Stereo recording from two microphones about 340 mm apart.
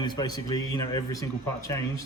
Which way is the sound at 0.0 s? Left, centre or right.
Centre.